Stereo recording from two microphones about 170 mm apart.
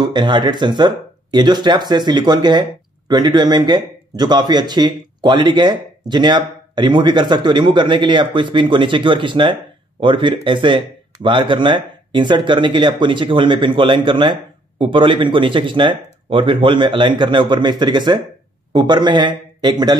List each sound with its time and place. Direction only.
0.0 s speech: 25° right (ahead or behind)